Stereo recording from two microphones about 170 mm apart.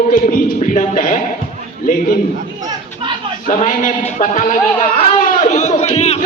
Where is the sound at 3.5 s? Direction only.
50° left (ahead or behind).